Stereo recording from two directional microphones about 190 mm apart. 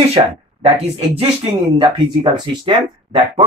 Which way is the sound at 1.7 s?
25° right (ahead or behind).